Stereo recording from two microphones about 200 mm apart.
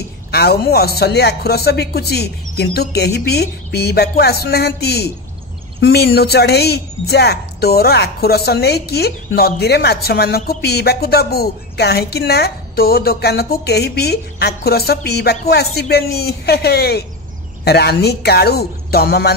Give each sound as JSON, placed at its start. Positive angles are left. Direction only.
{"t": 0.3, "sound": "a woman's voice", "side_deg": 50}